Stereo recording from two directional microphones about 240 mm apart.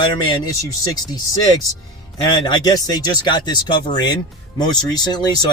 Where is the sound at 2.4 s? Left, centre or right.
Centre.